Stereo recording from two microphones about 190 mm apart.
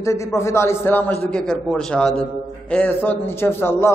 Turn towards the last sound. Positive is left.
turn(degrees=10)  # may be behind; listen again after turning